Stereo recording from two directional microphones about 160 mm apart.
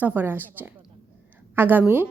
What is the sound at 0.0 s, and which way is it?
A woman's voice, 10° right (ahead or behind).